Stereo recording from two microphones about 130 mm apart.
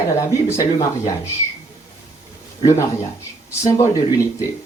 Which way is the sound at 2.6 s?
20° left (ahead or behind).